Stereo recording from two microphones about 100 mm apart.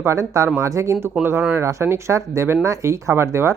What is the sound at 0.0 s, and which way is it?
Speech, 30° right (ahead or behind).